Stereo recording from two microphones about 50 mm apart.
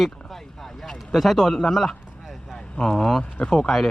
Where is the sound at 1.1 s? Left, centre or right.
Centre.